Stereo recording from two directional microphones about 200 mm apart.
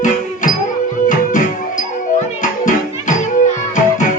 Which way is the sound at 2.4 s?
40° left (ahead or behind).